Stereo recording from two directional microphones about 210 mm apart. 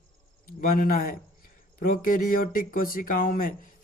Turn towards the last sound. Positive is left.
turn(degrees=40)  # may be behind; listen again after turning